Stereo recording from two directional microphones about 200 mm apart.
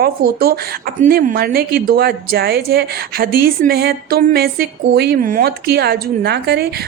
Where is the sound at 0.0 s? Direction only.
50° right (ahead or behind).